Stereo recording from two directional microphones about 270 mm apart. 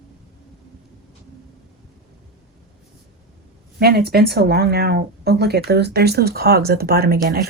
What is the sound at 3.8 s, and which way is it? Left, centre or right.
Speech, right.